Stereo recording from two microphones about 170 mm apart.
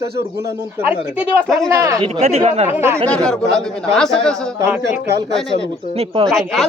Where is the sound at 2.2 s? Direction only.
40° right (ahead or behind).